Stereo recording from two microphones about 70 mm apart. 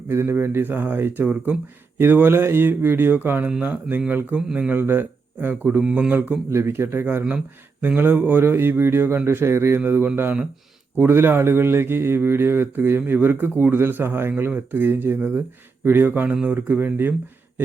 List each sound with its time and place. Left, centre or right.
0.1 s a man's voice: right
5.8 s speech: centre
6.5 s a man's voice: right